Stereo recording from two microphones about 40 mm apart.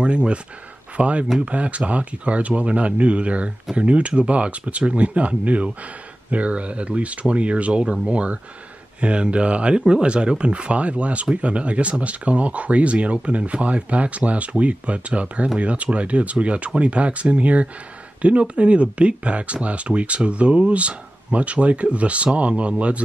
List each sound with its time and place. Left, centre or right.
0.0 s speech: right
7.8 s speech: right